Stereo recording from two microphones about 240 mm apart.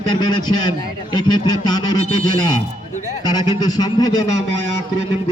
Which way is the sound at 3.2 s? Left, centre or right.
Centre.